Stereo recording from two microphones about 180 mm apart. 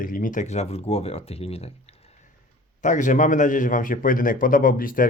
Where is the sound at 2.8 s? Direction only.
45° left (ahead or behind).